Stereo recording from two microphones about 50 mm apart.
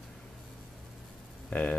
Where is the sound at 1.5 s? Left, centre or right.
Left.